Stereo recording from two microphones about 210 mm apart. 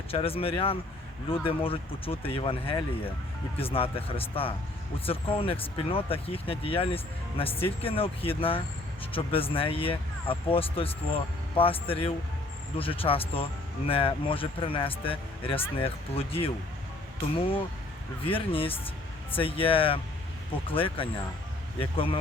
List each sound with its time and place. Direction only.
0.1 s speech: 25° left (ahead or behind)
18.3 s speech: 25° left (ahead or behind)